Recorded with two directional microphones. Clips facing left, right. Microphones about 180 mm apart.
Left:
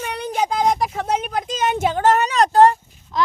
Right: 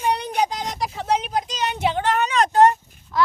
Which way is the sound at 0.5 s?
50° left (ahead or behind).